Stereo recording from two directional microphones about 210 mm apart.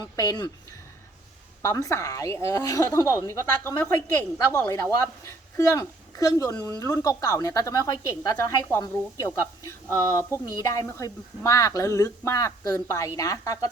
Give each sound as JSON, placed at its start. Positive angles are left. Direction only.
{"t": 0.0, "sound": "speech", "side_deg": 15}